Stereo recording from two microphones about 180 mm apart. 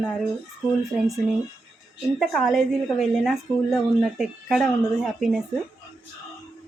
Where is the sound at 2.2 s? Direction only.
Centre (ahead or behind).